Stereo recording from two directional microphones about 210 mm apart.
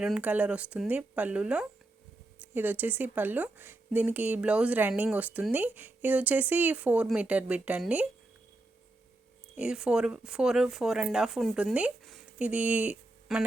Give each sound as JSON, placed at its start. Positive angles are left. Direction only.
{"t": 0.0, "sound": "speech", "side_deg": -5}
{"t": 9.6, "sound": "speech", "side_deg": -5}